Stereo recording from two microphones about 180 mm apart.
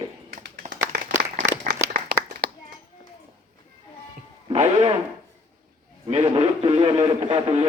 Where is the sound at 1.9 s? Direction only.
60° right (ahead or behind).